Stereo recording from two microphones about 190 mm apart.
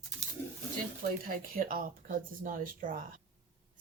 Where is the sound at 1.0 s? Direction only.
50° right (ahead or behind).